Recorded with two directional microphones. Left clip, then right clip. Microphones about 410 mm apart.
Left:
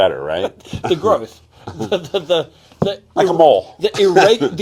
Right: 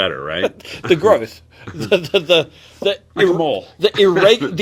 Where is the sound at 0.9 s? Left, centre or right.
Right.